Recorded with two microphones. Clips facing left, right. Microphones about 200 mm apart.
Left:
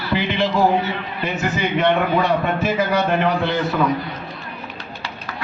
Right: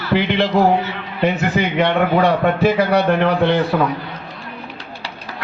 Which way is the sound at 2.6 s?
65° right (ahead or behind).